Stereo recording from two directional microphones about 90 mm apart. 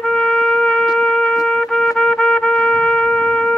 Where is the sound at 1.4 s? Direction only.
5° left (ahead or behind).